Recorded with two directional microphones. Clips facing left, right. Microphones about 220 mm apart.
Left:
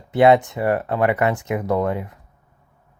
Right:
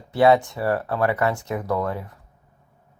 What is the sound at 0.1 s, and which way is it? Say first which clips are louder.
Speech: left 3 dB; 20° left (ahead or behind).